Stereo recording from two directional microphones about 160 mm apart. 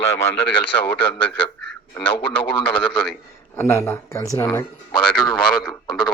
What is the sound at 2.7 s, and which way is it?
A man's voice, 5° left (ahead or behind).